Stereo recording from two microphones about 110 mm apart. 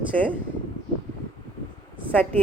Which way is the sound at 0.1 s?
10° left (ahead or behind).